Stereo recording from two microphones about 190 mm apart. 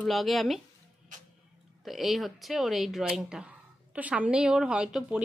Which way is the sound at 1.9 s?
Centre (ahead or behind).